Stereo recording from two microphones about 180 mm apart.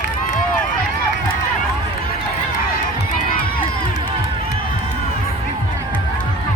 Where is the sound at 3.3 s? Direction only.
50° left (ahead or behind).